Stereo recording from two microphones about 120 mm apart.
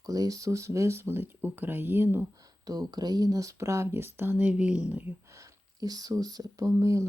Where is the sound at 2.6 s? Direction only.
35° right (ahead or behind); by 5.2 s 10° right (ahead or behind).